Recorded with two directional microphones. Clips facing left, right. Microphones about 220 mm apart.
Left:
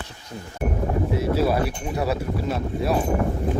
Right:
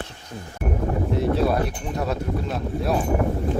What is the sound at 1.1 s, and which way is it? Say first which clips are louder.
A man's voice: right 1 dB; 5° left (ahead or behind).